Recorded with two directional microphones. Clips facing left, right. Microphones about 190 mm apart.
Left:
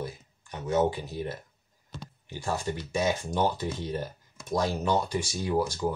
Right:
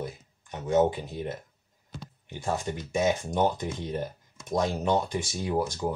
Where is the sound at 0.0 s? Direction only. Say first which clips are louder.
Even; 20° right (ahead or behind).